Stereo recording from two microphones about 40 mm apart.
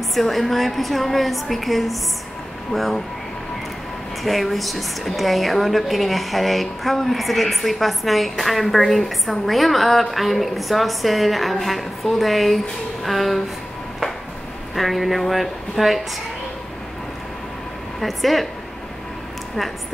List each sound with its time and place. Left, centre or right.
0.1 s a woman's voice: centre
4.2 s a woman's voice: centre
14.8 s a woman's voice: centre
18.0 s a woman's voice: centre